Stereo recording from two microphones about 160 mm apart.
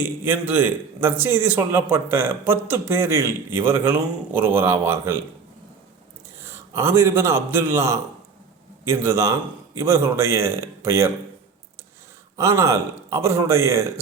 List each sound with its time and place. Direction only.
0.0 s a man's voice: 15° right (ahead or behind)
6.4 s a man's voice: 15° right (ahead or behind)
12.4 s speech: 20° right (ahead or behind)